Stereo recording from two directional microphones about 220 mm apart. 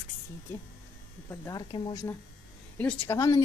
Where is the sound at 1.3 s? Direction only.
15° left (ahead or behind).